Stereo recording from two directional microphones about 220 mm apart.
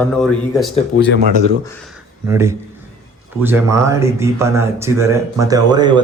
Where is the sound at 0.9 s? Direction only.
45° left (ahead or behind).